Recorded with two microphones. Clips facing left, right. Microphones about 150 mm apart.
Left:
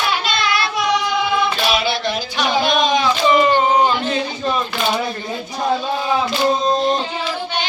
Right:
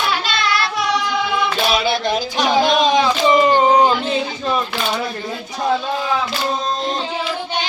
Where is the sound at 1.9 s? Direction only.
45° right (ahead or behind); by 3.5 s 25° right (ahead or behind).